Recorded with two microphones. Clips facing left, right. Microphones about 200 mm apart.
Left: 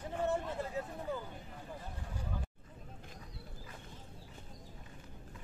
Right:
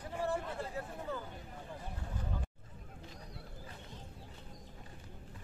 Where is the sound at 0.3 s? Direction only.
15° left (ahead or behind).